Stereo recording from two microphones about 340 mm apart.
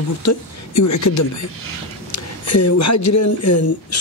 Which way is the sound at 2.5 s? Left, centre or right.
Left.